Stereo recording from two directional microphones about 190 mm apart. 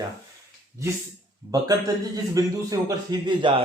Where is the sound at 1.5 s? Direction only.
20° right (ahead or behind).